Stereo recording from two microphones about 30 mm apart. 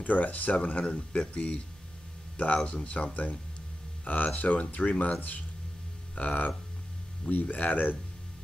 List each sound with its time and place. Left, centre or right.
0.0 s speech: left
0.7 s speech: left
1.1 s speech: left
6.1 s speech: left
7.2 s speech: left